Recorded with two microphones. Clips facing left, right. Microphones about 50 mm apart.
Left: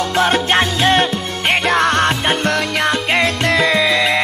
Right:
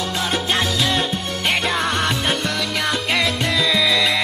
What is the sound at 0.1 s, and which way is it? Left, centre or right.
Music, left.